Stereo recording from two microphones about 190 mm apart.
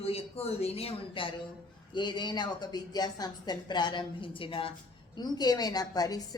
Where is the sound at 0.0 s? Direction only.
30° left (ahead or behind).